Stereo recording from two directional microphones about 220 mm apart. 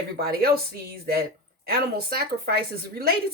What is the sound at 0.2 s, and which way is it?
Speech, 45° right (ahead or behind).